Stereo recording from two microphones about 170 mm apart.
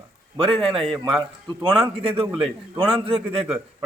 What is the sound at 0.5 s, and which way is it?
Speech, centre (ahead or behind).